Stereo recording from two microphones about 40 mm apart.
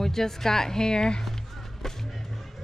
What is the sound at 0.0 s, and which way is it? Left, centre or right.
Speech, centre.